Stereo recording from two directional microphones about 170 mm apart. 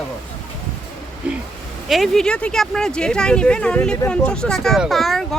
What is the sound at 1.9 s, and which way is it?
Speech, centre (ahead or behind).